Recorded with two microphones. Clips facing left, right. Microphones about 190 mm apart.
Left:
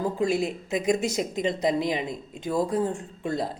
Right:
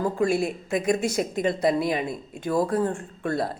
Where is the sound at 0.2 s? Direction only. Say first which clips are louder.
Right 2 dB; 20° left (ahead or behind).